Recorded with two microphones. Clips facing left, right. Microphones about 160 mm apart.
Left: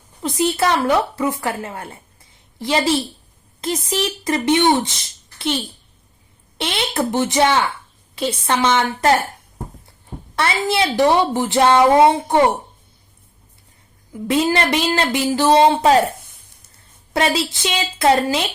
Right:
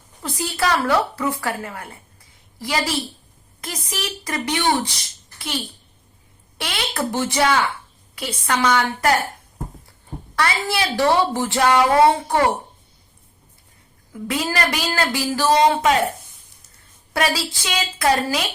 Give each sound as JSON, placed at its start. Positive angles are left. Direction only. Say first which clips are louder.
{"t": 0.2, "sound": "a woman's voice", "louder": "left 6 dB", "side_deg": 20}
{"t": 10.3, "sound": "a woman's voice", "louder": "left 3 dB", "side_deg": 25}
{"t": 14.1, "sound": "a woman's voice", "louder": "left 6 dB", "side_deg": 25}
{"t": 17.2, "sound": "a woman's voice", "louder": "left 3 dB", "side_deg": 25}